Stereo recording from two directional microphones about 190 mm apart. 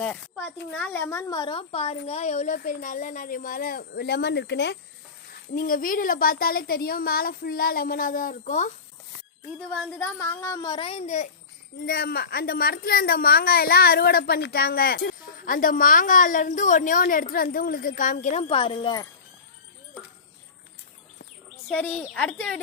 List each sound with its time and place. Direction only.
0.0 s a woman's voice: 5° left (ahead or behind); by 4.8 s 65° left (ahead or behind)
5.5 s a woman's voice: 50° left (ahead or behind)
9.6 s a woman's voice: 5° left (ahead or behind); by 11.3 s 40° left (ahead or behind)
11.8 s a woman's voice: 50° left (ahead or behind); by 19.0 s 25° left (ahead or behind)
21.7 s a woman's voice: 5° left (ahead or behind)